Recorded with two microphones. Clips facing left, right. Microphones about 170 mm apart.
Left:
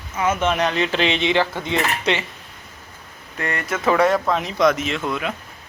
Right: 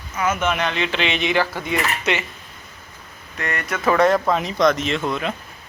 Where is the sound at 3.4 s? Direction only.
25° left (ahead or behind).